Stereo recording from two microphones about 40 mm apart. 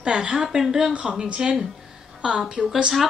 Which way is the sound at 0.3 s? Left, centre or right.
Centre.